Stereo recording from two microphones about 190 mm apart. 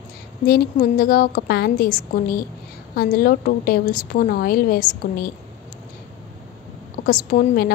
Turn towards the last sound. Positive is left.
turn(degrees=45)  # may be behind; listen again after turning